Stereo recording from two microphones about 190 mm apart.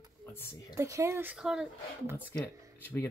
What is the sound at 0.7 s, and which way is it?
Speech, 15° right (ahead or behind).